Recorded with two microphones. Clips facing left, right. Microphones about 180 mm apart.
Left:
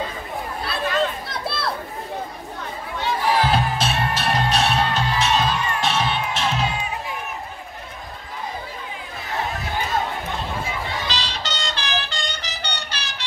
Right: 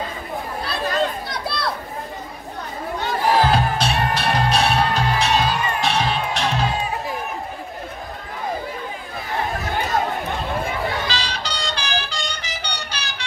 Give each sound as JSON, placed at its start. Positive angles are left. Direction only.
{"t": 0.8, "sound": "children playing", "side_deg": -40}
{"t": 1.2, "sound": "children playing", "side_deg": 0}
{"t": 3.0, "sound": "music", "side_deg": -45}
{"t": 3.5, "sound": "music", "side_deg": 0}
{"t": 11.1, "sound": "music", "side_deg": 0}